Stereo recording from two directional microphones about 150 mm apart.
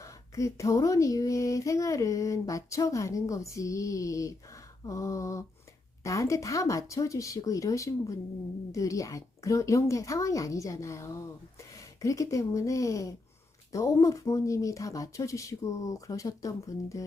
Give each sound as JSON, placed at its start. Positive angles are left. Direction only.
{"t": 0.0, "sound": "speech", "side_deg": 20}